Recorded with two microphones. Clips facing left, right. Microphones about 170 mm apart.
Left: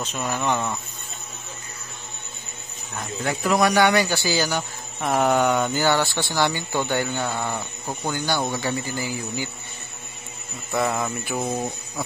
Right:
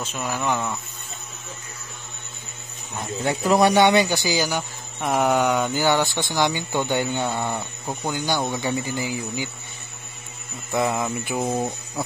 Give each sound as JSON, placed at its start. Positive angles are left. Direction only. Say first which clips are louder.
{"t": 0.0, "sound": "speech", "louder": "left 1 dB", "side_deg": -5}
{"t": 3.0, "sound": "speech", "louder": "right 2 dB", "side_deg": -25}
{"t": 7.3, "sound": "speech", "louder": "right 1 dB", "side_deg": -5}
{"t": 8.5, "sound": "speech", "louder": "right 1 dB", "side_deg": -20}
{"t": 10.7, "sound": "speech", "louder": "right 1 dB", "side_deg": -10}